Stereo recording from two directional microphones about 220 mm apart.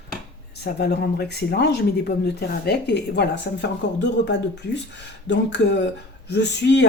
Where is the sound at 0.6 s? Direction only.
50° left (ahead or behind).